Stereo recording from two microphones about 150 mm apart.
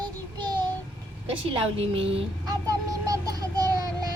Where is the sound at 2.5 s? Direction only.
25° right (ahead or behind).